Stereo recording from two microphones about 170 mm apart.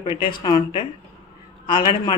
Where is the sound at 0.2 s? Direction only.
25° left (ahead or behind).